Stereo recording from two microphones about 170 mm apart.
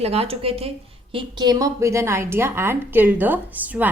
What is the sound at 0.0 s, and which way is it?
Speech, 35° right (ahead or behind).